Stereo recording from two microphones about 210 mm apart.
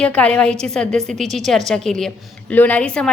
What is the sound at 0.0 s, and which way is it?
A woman's voice, 5° left (ahead or behind).